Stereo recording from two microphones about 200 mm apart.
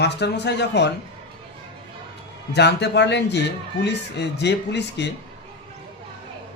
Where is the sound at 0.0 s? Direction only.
55° left (ahead or behind).